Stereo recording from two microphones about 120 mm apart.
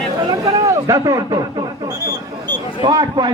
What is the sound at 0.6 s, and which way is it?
Speech, 25° right (ahead or behind).